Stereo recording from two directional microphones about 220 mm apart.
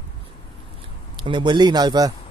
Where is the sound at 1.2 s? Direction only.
20° right (ahead or behind).